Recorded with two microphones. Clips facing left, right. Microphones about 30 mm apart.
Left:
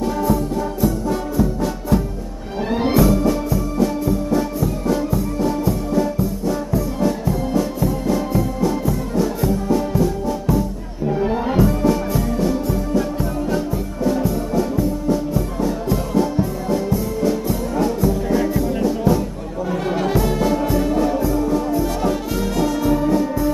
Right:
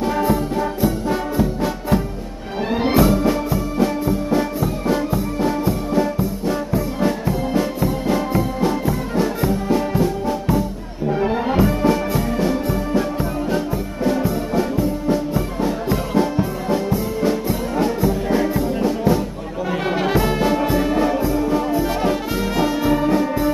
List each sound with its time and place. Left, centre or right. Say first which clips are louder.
0.0 s music: right 1 dB; right
2.7 s music: even; centre
3.0 s music: right 1 dB; right